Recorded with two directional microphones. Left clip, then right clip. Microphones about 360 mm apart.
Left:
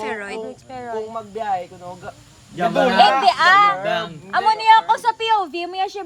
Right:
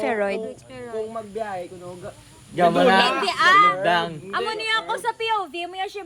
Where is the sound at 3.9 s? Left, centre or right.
Centre.